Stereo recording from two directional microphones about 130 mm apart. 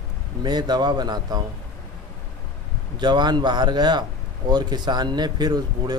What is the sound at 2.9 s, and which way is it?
Speech, 35° right (ahead or behind).